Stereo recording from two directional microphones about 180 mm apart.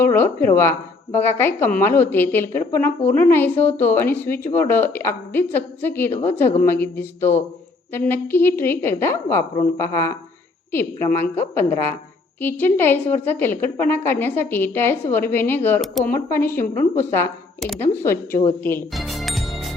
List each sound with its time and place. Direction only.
0.0 s a woman's voice: 10° left (ahead or behind)
15.8 s speech: centre (ahead or behind)
16.1 s a woman's voice: 10° left (ahead or behind)
18.9 s music: centre (ahead or behind)